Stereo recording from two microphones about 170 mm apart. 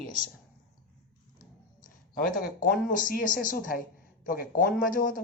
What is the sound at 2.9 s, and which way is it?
Speech, 55° left (ahead or behind).